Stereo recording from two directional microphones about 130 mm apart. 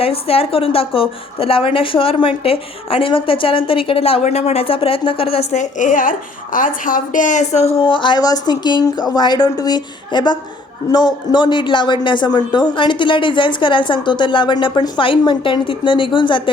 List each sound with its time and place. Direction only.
0.0 s a woman's voice: 50° left (ahead or behind)